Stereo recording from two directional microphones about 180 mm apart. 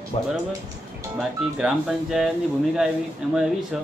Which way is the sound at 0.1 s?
35° left (ahead or behind).